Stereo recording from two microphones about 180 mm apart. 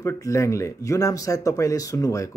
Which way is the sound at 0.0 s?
15° left (ahead or behind).